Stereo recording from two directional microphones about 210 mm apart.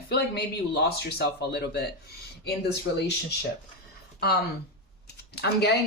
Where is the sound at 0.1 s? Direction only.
50° left (ahead or behind).